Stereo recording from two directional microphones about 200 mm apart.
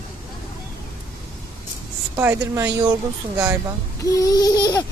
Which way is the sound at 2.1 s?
10° right (ahead or behind).